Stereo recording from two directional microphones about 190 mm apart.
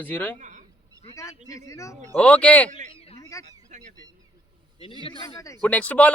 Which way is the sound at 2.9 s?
30° left (ahead or behind).